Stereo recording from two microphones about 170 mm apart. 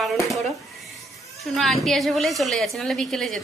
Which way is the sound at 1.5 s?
Centre (ahead or behind).